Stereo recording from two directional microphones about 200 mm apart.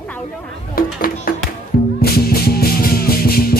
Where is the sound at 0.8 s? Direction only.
45° left (ahead or behind).